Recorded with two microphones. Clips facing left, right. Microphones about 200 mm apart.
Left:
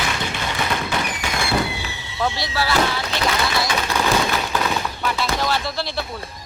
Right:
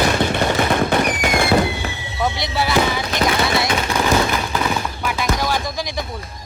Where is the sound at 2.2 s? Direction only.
20° right (ahead or behind).